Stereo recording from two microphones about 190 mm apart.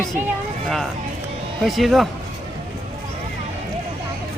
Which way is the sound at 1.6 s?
Centre (ahead or behind).